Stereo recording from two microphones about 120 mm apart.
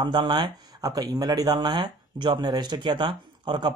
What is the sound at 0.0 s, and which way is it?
Speech, 40° right (ahead or behind).